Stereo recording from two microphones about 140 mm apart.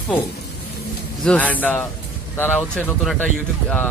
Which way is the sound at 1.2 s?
10° left (ahead or behind).